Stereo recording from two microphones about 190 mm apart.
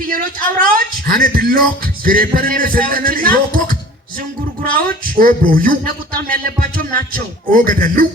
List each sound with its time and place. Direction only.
0.1 s speech: 45° right (ahead or behind)